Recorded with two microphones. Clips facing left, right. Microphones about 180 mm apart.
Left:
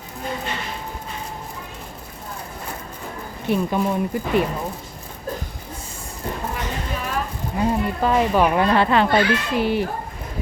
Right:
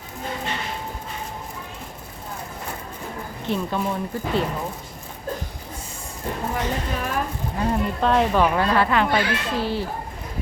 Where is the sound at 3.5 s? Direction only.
15° left (ahead or behind).